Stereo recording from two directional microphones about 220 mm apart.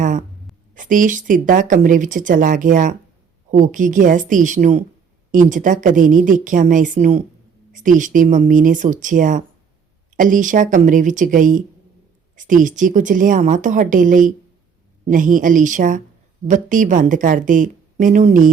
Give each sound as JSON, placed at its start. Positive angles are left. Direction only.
{"t": 0.8, "sound": "speech", "side_deg": -35}